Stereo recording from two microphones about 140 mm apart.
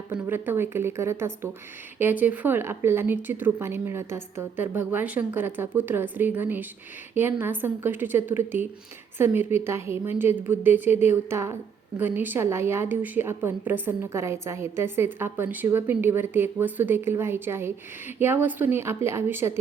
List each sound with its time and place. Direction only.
0.1 s speech: 15° right (ahead or behind)